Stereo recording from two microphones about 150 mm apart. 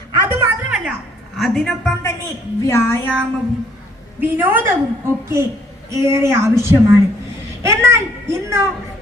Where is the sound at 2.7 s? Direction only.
15° left (ahead or behind).